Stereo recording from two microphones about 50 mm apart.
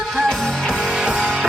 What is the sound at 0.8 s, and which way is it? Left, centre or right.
Music, centre.